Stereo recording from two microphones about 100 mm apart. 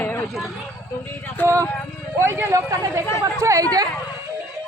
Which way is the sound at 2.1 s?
25° right (ahead or behind).